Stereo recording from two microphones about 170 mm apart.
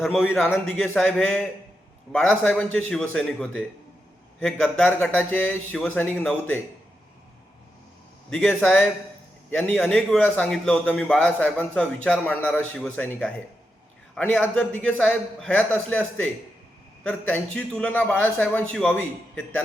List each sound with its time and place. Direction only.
0.0 s a man's voice: centre (ahead or behind)
8.3 s a man's voice: 10° left (ahead or behind)